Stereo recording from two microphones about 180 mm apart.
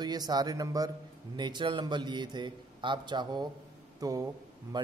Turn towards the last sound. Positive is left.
turn(degrees=-20)  # may be behind; listen again after turning